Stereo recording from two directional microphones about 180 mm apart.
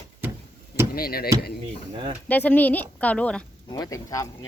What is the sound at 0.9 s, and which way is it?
Speech, 55° left (ahead or behind).